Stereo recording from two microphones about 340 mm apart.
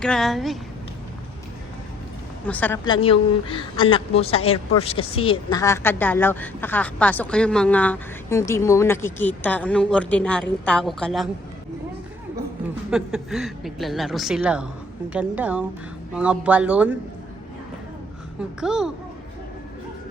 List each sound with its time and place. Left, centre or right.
0.0 s a woman's voice: centre
2.5 s a woman's voice: centre
12.9 s a woman's voice: centre
18.6 s a woman's voice: centre